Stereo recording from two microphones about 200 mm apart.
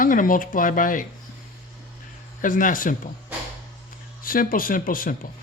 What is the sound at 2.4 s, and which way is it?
Speech, 40° left (ahead or behind).